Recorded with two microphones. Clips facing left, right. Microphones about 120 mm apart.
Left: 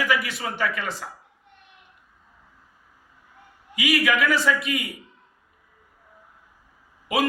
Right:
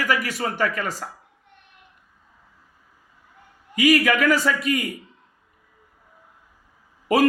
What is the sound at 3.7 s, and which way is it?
A man's voice, 40° right (ahead or behind).